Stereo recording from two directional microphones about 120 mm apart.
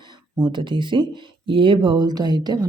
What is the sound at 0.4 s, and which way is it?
Speech, 40° right (ahead or behind).